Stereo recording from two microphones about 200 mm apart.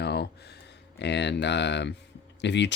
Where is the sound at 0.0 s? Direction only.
55° left (ahead or behind).